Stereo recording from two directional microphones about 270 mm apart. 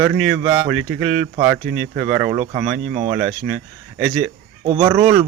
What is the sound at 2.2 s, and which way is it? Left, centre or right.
Speech, centre.